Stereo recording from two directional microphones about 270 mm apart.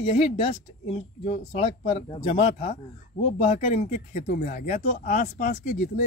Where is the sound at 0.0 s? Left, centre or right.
Left.